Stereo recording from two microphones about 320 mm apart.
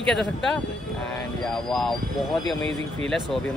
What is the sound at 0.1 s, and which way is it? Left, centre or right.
Speech, centre.